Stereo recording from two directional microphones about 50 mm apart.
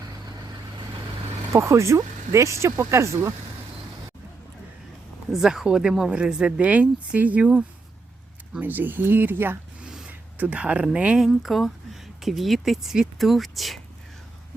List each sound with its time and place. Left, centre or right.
1.5 s speech: right
5.3 s a man's voice: centre
6.7 s speech: right
8.6 s speech: right
9.8 s a sound: centre
10.1 s a sound: right
10.9 s speech: right
11.4 s speech: centre